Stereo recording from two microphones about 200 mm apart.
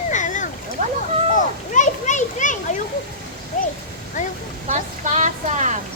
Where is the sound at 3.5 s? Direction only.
35° left (ahead or behind).